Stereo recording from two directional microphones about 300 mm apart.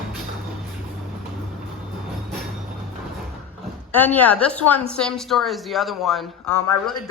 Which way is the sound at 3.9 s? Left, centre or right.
Centre.